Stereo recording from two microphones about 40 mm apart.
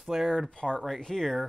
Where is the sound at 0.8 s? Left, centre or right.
Centre.